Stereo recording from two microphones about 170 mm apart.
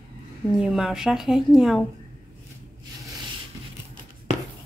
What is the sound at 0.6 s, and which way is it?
Speech, 5° right (ahead or behind).